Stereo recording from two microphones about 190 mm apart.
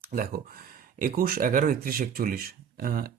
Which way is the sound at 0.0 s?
50° right (ahead or behind).